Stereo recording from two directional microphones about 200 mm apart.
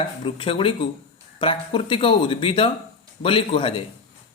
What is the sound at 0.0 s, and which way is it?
A man's voice, 25° left (ahead or behind).